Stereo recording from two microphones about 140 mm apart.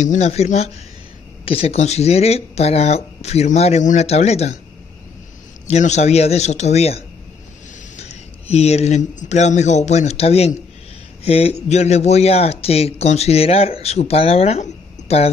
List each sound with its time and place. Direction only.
0.0 s a man's voice: 55° left (ahead or behind)
5.7 s a man's voice: 55° left (ahead or behind)